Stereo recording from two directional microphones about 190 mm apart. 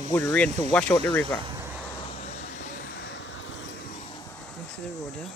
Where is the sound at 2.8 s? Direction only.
70° left (ahead or behind).